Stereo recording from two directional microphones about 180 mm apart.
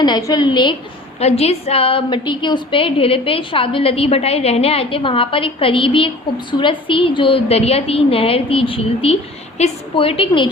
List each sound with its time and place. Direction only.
0.0 s a woman's voice: 20° left (ahead or behind)